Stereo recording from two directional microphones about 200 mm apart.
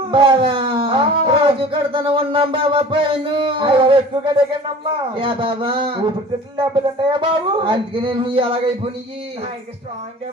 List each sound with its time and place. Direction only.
0.1 s speech: 25° right (ahead or behind)